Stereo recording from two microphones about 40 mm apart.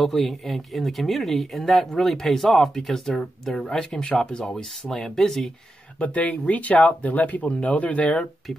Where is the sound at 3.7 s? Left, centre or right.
Left.